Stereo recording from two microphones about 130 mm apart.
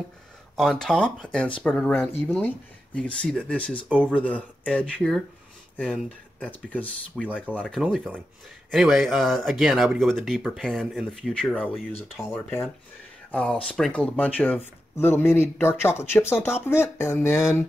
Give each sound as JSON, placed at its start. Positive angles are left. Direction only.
{"t": 0.6, "sound": "speech", "side_deg": 5}
{"t": 6.4, "sound": "speech", "side_deg": 10}
{"t": 8.7, "sound": "speech", "side_deg": -5}
{"t": 12.2, "sound": "speech", "side_deg": 20}